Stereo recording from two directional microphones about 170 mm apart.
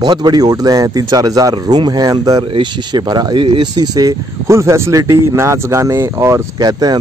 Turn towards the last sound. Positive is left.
turn(degrees=-25)  # may be behind; listen again after turning